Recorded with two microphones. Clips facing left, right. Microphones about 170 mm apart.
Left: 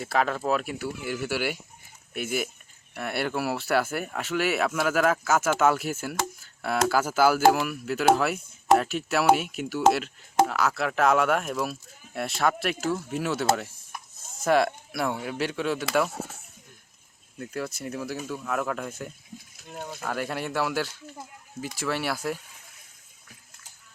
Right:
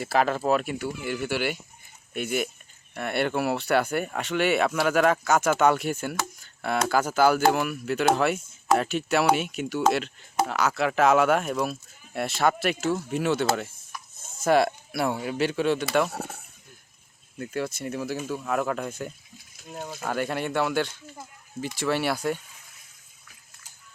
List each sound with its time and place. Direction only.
0.0 s speech: centre (ahead or behind)
13.9 s a sound: 55° left (ahead or behind)
14.4 s speech: centre (ahead or behind)
17.3 s speech: centre (ahead or behind)